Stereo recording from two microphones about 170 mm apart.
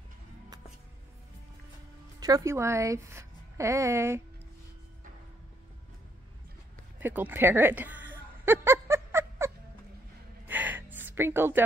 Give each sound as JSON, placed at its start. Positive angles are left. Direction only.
{"t": 2.1, "sound": "speech", "side_deg": -20}
{"t": 7.0, "sound": "a sound", "side_deg": -10}
{"t": 10.4, "sound": "gasp", "side_deg": -10}